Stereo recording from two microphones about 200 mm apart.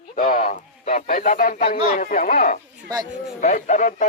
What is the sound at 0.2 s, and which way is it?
A man's voice, 45° left (ahead or behind).